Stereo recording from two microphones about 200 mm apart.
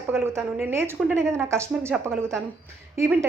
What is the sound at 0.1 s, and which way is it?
A woman's voice, 10° right (ahead or behind).